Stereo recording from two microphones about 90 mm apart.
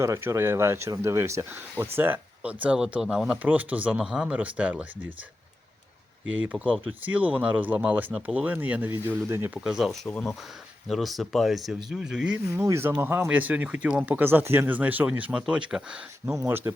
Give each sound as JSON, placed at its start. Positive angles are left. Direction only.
{"t": 0.0, "sound": "speech", "side_deg": -30}
{"t": 6.3, "sound": "speech", "side_deg": -15}
{"t": 8.9, "sound": "speech", "side_deg": -30}
{"t": 9.6, "sound": "speech", "side_deg": -5}
{"t": 12.5, "sound": "speech", "side_deg": -30}
{"t": 16.3, "sound": "speech", "side_deg": -30}